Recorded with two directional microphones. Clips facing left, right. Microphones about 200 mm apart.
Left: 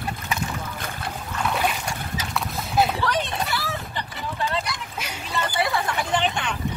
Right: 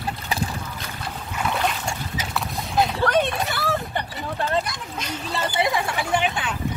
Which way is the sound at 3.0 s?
50° right (ahead or behind).